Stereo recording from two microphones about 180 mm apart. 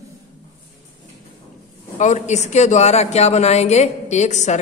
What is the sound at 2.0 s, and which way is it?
Speech, 40° left (ahead or behind).